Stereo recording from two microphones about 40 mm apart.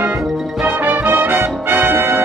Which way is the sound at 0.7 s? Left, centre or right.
Right.